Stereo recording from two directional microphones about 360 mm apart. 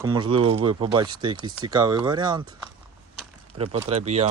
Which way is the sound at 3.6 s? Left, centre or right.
Centre.